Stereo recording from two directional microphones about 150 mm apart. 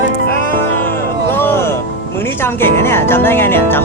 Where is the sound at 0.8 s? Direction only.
15° left (ahead or behind).